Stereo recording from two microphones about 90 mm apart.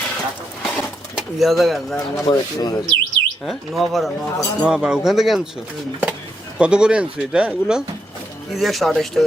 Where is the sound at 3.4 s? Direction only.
Centre (ahead or behind).